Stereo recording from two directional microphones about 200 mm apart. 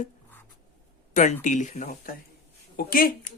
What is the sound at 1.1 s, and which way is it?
Speech, 40° left (ahead or behind).